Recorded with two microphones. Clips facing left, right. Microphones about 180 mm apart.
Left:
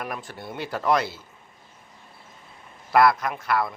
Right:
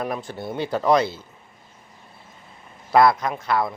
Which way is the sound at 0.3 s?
25° right (ahead or behind).